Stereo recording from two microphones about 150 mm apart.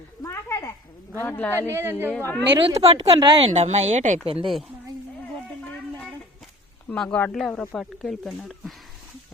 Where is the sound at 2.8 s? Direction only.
40° right (ahead or behind).